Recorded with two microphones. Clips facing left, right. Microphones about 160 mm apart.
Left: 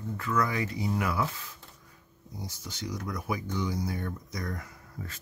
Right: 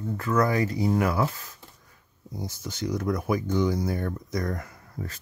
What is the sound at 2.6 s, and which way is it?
Speech, 50° right (ahead or behind).